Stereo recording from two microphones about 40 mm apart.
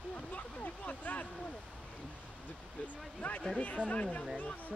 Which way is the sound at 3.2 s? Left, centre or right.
Left.